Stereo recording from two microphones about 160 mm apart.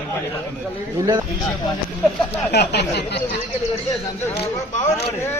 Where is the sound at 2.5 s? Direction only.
90° left.